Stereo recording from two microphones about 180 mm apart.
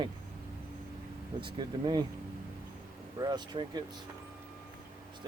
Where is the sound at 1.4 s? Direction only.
25° right (ahead or behind).